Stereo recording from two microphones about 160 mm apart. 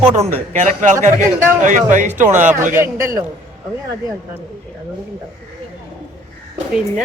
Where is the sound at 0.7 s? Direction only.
50° right (ahead or behind).